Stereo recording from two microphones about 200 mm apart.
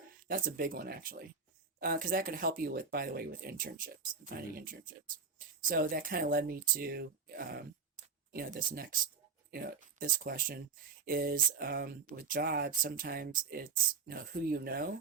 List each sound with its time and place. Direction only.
0.3 s speech: 45° right (ahead or behind)